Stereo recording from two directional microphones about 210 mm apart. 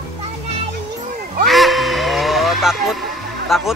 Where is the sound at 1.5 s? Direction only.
Centre (ahead or behind).